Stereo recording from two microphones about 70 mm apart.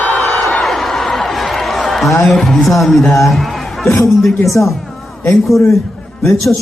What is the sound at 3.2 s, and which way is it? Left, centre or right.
Music, centre.